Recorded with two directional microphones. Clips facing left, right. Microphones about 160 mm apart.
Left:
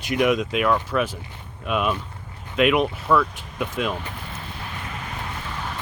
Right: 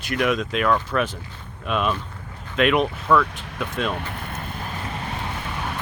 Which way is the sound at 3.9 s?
60° right (ahead or behind).